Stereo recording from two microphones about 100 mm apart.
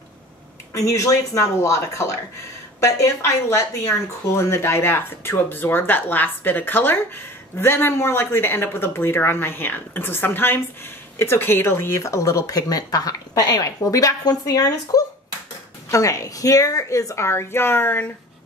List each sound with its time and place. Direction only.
0.7 s a woman's voice: 35° left (ahead or behind)